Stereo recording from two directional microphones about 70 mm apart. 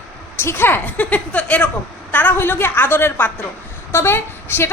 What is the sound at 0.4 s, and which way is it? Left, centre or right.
A woman's voice, left.